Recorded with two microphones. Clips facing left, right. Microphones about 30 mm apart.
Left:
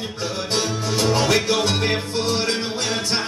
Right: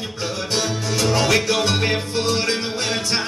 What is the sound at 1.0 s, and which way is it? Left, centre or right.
Music, right.